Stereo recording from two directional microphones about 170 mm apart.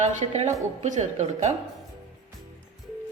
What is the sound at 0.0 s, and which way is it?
A woman's voice, 40° right (ahead or behind).